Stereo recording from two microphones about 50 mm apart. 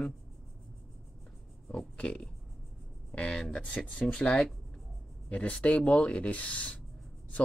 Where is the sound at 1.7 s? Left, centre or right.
Left.